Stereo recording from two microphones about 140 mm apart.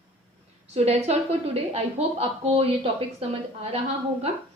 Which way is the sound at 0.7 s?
50° right (ahead or behind).